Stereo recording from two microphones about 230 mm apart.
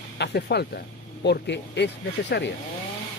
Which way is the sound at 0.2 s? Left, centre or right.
Left.